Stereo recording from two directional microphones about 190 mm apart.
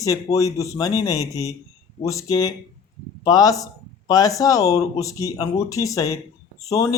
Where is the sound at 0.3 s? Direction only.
15° left (ahead or behind).